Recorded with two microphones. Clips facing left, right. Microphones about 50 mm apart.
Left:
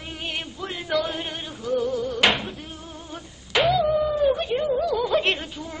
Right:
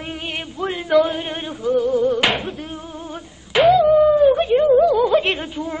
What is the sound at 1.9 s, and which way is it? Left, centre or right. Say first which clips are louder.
Speech: right 9 dB; right.